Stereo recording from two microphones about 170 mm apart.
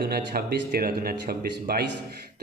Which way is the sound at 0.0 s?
65° right (ahead or behind).